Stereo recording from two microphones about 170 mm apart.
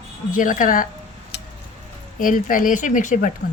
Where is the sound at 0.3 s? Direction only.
50° left (ahead or behind).